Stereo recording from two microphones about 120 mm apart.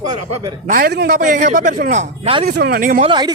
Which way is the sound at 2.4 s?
65° right (ahead or behind).